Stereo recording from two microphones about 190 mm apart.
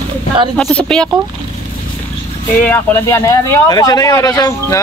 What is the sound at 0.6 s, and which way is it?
Speech, 5° left (ahead or behind).